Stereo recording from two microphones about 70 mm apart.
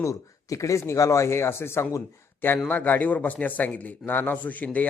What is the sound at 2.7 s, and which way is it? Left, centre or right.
A man's voice, left.